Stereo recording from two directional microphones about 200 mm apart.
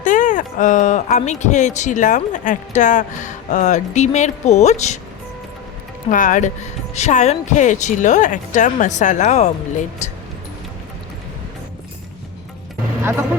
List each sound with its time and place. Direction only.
0.0 s speech: 40° left (ahead or behind)
6.1 s speech: 40° left (ahead or behind)
13.0 s music: 10° right (ahead or behind)